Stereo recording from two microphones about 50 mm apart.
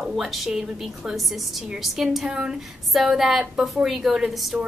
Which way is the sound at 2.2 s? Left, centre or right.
Centre.